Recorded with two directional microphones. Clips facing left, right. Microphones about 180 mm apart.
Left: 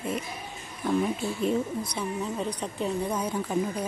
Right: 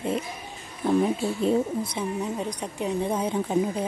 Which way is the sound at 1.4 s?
30° right (ahead or behind).